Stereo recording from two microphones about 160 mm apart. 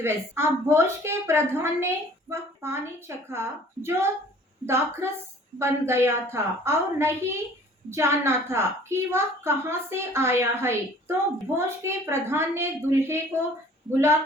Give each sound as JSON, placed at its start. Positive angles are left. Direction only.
{"t": 0.0, "sound": "a woman's voice", "side_deg": -15}